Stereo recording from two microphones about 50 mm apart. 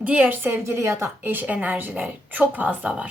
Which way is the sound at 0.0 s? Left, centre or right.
Right.